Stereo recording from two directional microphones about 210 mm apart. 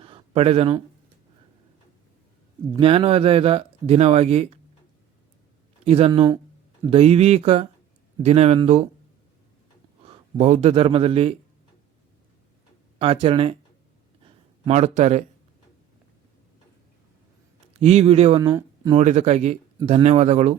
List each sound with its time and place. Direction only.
0.0 s a sound: 25° right (ahead or behind)
2.7 s speech: 25° right (ahead or behind)
5.8 s speech: 30° right (ahead or behind)
6.9 s speech: 30° right (ahead or behind)
10.1 s a man's voice: 35° right (ahead or behind)
13.0 s speech: 25° right (ahead or behind)
14.6 s speech: 35° right (ahead or behind)
17.7 s speech: 30° right (ahead or behind)
18.4 s speech: 15° right (ahead or behind)
18.9 s speech: 30° right (ahead or behind)